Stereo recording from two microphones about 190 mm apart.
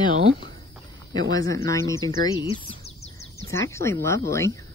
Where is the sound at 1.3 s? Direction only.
15° left (ahead or behind).